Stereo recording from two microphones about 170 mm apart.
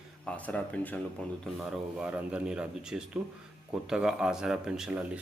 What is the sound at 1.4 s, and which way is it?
Speech, 5° right (ahead or behind).